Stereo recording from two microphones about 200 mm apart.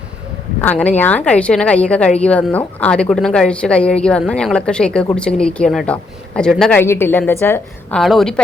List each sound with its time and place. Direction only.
0.6 s speech: 5° left (ahead or behind)